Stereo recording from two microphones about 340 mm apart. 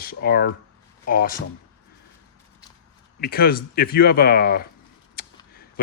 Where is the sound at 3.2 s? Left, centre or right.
Left.